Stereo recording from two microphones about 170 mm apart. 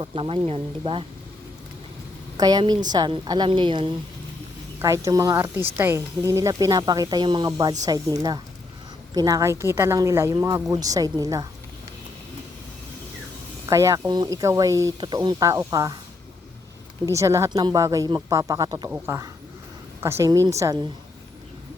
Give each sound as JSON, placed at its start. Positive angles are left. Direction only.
{"t": 0.0, "sound": "speech", "side_deg": -35}
{"t": 2.4, "sound": "speech", "side_deg": -25}
{"t": 13.7, "sound": "speech", "side_deg": -20}
{"t": 17.1, "sound": "a woman's voice", "side_deg": -15}